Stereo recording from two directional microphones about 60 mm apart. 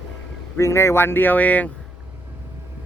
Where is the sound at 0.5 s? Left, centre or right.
Left.